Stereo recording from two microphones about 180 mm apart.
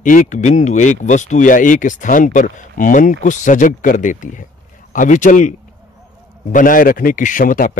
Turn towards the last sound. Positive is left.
turn(degrees=50)  # may be behind; listen again after turning